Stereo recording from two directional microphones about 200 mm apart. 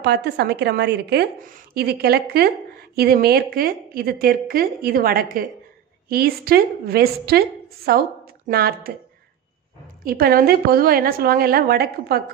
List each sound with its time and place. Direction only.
0.0 s a woman's voice: 55° right (ahead or behind)
10.0 s a woman's voice: 45° right (ahead or behind)